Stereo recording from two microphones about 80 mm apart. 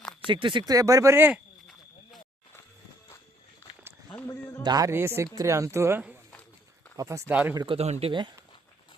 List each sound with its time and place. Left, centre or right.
0.3 s speech: right
0.6 s speech: right
4.3 s a man's voice: left
4.6 s speech: right
4.9 s speech: right
5.3 s speech: right
7.3 s speech: right
7.7 s speech: right